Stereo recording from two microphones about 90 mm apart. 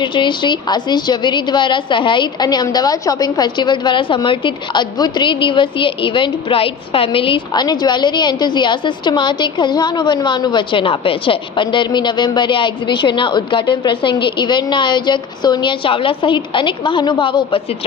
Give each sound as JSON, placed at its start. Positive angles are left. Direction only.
{"t": 0.0, "sound": "a woman's voice", "side_deg": 60}
{"t": 7.5, "sound": "a woman's voice", "side_deg": 55}